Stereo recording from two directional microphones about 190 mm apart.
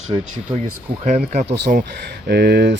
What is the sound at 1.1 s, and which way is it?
Speech, 35° right (ahead or behind).